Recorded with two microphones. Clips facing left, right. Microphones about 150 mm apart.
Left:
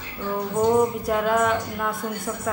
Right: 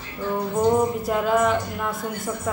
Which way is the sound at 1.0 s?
Centre (ahead or behind).